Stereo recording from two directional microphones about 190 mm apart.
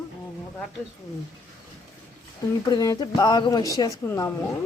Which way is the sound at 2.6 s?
20° left (ahead or behind).